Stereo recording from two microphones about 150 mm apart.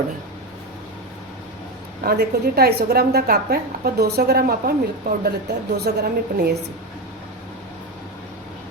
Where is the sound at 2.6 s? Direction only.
90° right.